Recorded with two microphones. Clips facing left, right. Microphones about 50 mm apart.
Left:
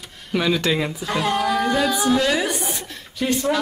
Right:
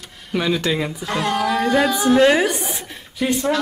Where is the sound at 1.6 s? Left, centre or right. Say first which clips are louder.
Right 3 dB; right.